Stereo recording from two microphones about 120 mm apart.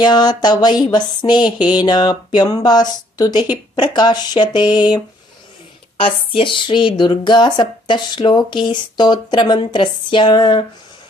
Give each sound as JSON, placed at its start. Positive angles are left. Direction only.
{"t": 0.0, "sound": "speech", "side_deg": 35}
{"t": 6.0, "sound": "speech", "side_deg": 45}